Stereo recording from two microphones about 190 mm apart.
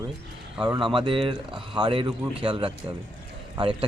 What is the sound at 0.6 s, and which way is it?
A man's voice, 25° right (ahead or behind).